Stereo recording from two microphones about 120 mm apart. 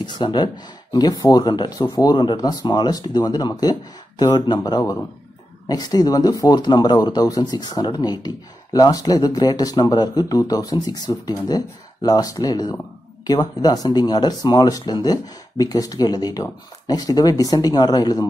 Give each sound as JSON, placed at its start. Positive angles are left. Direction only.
{"t": 0.0, "sound": "speech", "side_deg": 40}